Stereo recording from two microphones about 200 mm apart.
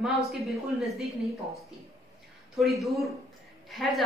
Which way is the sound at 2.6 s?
Centre (ahead or behind).